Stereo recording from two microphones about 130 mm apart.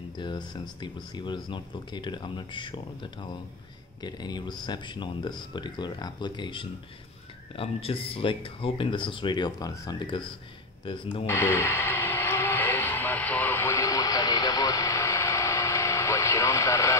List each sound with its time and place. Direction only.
0.2 s speech: 35° left (ahead or behind)
11.2 s radio: 20° left (ahead or behind)